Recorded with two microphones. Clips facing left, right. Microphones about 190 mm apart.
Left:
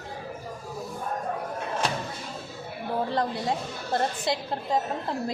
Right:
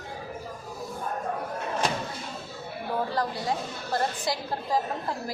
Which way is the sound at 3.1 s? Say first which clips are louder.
Left 2 dB; 25° left (ahead or behind).